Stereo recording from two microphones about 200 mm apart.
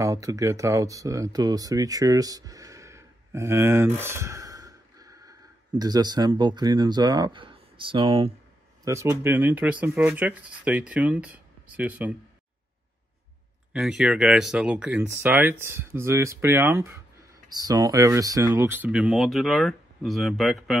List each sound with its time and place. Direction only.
0.0 s speech: 15° right (ahead or behind)
8.8 s speech: 15° right (ahead or behind)
13.7 s speech: 5° right (ahead or behind)